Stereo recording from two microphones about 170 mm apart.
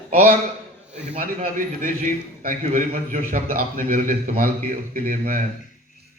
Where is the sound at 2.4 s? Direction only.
50° right (ahead or behind).